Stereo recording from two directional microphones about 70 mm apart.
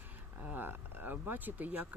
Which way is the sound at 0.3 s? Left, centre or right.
Right.